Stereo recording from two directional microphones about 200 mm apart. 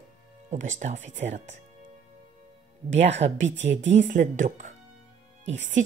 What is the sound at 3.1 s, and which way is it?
Speech, 35° right (ahead or behind).